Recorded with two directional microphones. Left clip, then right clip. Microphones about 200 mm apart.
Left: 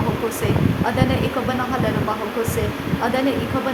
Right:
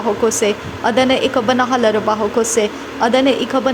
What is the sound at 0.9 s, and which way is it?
A woman's voice, 35° right (ahead or behind).